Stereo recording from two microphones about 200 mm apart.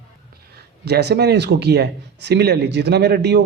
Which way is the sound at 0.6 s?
55° right (ahead or behind).